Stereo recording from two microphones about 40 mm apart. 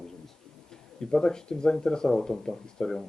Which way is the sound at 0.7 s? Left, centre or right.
Centre.